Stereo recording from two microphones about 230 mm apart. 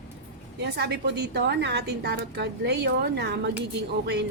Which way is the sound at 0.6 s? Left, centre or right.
Right.